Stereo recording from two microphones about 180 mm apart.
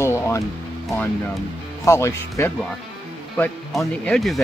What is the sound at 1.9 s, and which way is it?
Speech, 15° left (ahead or behind).